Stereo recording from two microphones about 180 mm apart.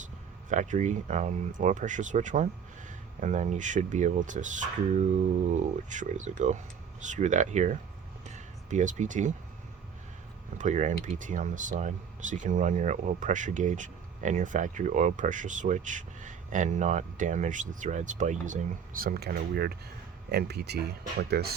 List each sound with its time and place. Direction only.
0.5 s speech: 40° right (ahead or behind)
10.6 s speech: 45° right (ahead or behind); by 21.5 s 60° right (ahead or behind)